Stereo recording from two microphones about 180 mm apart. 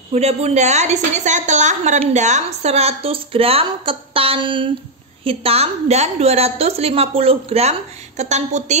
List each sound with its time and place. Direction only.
0.1 s a woman's voice: 35° right (ahead or behind)